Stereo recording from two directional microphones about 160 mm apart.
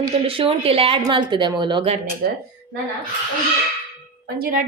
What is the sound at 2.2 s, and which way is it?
Speech, 65° right (ahead or behind).